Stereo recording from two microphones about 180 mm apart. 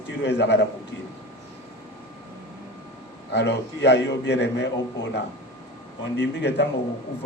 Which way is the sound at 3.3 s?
70° left (ahead or behind).